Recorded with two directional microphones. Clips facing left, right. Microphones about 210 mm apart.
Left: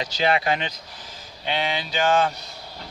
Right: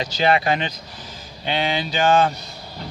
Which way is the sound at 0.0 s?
35° right (ahead or behind).